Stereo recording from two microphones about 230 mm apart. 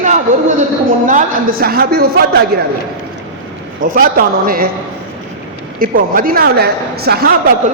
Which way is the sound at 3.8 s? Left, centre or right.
Right.